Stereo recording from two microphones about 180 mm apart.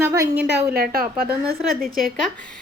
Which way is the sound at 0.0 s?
15° right (ahead or behind).